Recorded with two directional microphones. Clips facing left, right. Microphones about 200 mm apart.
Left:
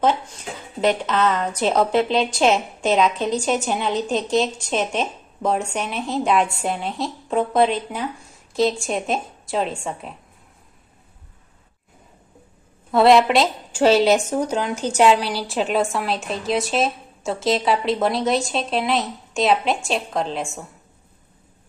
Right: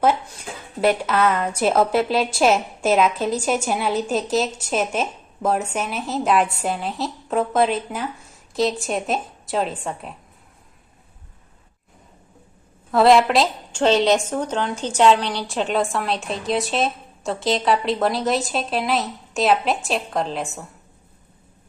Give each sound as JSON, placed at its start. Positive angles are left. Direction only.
{"t": 0.8, "sound": "a woman's voice", "side_deg": -10}
{"t": 12.9, "sound": "a woman's voice", "side_deg": 0}